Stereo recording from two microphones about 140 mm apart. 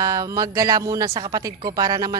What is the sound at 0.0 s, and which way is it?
Speech, 25° right (ahead or behind).